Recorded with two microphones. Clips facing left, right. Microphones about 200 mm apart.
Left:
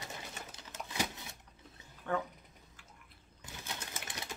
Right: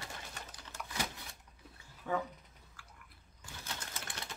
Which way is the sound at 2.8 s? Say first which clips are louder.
Right 4 dB; 20° left (ahead or behind).